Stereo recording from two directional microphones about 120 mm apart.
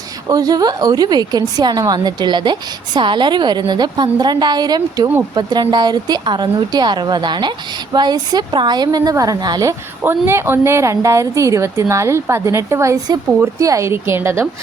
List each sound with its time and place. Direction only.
0.3 s a woman's voice: 30° right (ahead or behind)